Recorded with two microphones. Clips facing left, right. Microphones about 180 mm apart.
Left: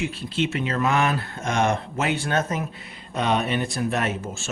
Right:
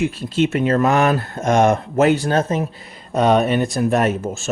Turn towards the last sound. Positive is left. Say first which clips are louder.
# right 8 dB
turn(degrees=-45)  # may be behind; listen again after turning